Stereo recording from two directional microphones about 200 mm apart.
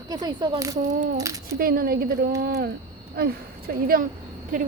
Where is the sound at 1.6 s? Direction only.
50° right (ahead or behind).